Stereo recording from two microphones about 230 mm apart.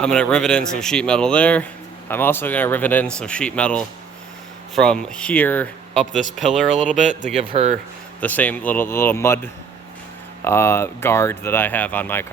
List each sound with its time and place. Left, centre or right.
0.0 s speech: centre
7.5 s speech: right
8.2 s speech: centre